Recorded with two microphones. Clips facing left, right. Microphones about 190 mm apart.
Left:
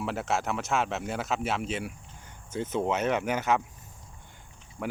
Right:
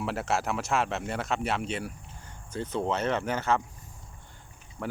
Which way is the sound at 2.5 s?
15° left (ahead or behind).